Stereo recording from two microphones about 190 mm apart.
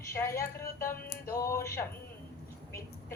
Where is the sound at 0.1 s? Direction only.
15° left (ahead or behind).